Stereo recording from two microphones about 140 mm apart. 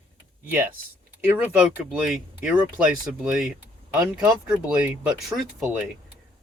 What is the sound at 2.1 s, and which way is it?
Speech, 5° right (ahead or behind).